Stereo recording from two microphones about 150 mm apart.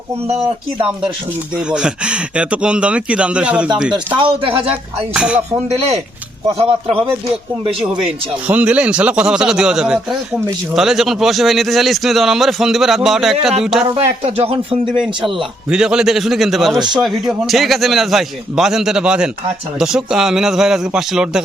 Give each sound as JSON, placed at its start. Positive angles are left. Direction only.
{"t": 1.5, "sound": "speech", "side_deg": -5}
{"t": 4.2, "sound": "speech", "side_deg": -35}
{"t": 5.1, "sound": "a man's voice", "side_deg": -5}
{"t": 5.6, "sound": "speech", "side_deg": -40}
{"t": 8.0, "sound": "a man's voice", "side_deg": -10}
{"t": 13.9, "sound": "speech", "side_deg": -40}
{"t": 15.7, "sound": "a man's voice", "side_deg": -5}